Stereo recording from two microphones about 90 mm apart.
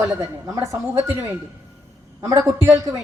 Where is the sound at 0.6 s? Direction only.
30° right (ahead or behind).